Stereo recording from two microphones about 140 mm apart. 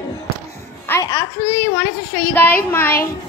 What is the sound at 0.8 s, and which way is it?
Music, 15° left (ahead or behind).